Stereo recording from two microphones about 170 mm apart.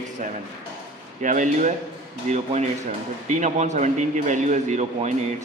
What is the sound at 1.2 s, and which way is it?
A man's voice, 50° right (ahead or behind).